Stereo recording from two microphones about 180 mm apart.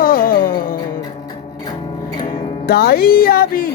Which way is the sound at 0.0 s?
55° left (ahead or behind).